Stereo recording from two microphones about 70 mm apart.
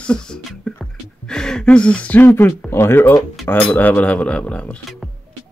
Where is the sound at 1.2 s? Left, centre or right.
Centre.